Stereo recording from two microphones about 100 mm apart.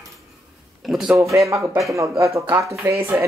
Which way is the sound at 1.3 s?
30° right (ahead or behind).